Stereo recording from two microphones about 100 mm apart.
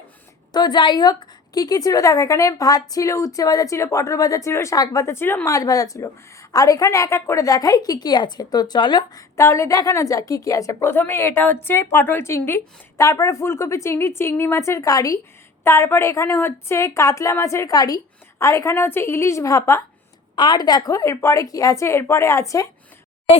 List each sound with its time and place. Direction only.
0.5 s a woman's voice: 45° left (ahead or behind); by 5.5 s 25° left (ahead or behind)
5.5 s a woman's voice: 35° left (ahead or behind)
9.3 s a woman's voice: 30° left (ahead or behind)
20.3 s a woman's voice: 50° left (ahead or behind); by 22.7 s 30° left (ahead or behind)